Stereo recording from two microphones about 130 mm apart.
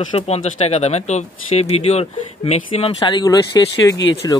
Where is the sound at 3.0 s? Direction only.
30° left (ahead or behind).